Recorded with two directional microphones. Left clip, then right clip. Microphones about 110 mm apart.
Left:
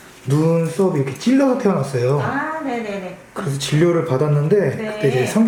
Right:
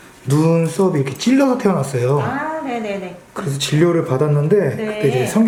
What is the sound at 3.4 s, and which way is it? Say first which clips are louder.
Speech: right 2 dB; centre (ahead or behind).